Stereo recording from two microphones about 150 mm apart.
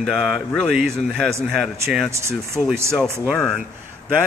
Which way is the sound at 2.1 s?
20° right (ahead or behind).